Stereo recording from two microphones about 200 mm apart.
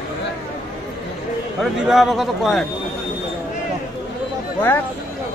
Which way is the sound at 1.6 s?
Centre (ahead or behind).